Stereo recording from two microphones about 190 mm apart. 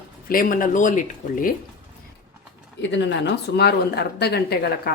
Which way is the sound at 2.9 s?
65° left (ahead or behind).